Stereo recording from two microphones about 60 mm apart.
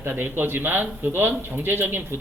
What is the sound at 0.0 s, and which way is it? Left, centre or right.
Speech, right.